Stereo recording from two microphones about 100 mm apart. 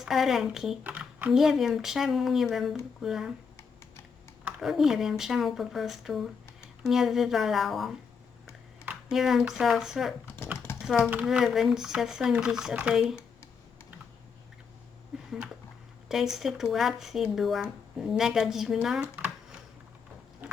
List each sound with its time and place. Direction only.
0.0 s speech: centre (ahead or behind)
0.9 s a sound: 15° right (ahead or behind)
1.3 s speech: 5° right (ahead or behind)
4.6 s speech: 5° right (ahead or behind)
9.0 s speech: centre (ahead or behind)
11.3 s speech: 5° right (ahead or behind)
15.1 s a sound: 5° right (ahead or behind)
16.0 s speech: 5° right (ahead or behind)
19.1 s a sound: 15° right (ahead or behind)